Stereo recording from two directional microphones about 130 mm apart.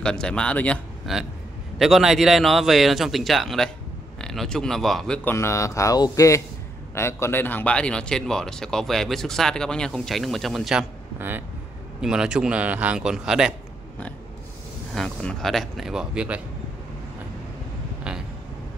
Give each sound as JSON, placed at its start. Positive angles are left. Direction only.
{"t": 0.0, "sound": "a man's voice", "side_deg": 5}
{"t": 1.1, "sound": "speech", "side_deg": 0}
{"t": 5.3, "sound": "speech", "side_deg": 20}
{"t": 11.1, "sound": "speech", "side_deg": -15}
{"t": 15.0, "sound": "speech", "side_deg": 0}
{"t": 18.1, "sound": "a sound", "side_deg": -5}